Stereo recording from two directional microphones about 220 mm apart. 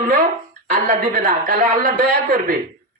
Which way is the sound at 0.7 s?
40° right (ahead or behind).